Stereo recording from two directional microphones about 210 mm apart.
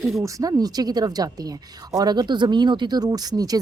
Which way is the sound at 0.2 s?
15° right (ahead or behind).